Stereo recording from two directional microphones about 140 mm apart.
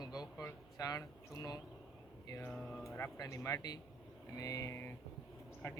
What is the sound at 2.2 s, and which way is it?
Speech, 20° left (ahead or behind).